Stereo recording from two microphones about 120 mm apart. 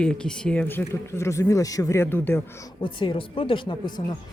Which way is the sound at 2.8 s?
45° left (ahead or behind).